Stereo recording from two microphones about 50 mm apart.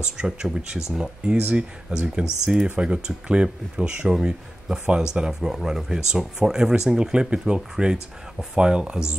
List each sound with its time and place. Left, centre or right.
0.0 s speech: centre
1.4 s speech: right